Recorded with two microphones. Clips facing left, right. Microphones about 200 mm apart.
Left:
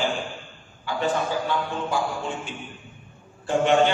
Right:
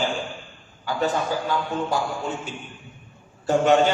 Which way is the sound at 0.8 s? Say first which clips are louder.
Right 1 dB; 40° right (ahead or behind).